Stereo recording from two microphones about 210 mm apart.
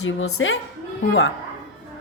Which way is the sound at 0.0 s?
75° left (ahead or behind).